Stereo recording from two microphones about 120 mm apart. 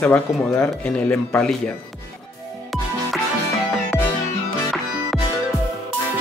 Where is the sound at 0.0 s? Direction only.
20° left (ahead or behind).